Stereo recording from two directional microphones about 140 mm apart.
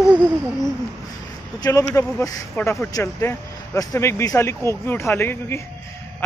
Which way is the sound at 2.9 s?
25° left (ahead or behind).